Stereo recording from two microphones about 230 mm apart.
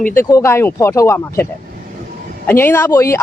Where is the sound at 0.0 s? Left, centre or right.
Centre.